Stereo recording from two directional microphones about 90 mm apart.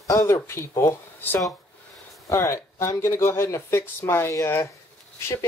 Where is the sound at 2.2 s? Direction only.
35° left (ahead or behind).